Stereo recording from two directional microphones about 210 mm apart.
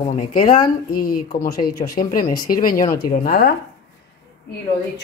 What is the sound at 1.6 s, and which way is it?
Speech, 20° left (ahead or behind).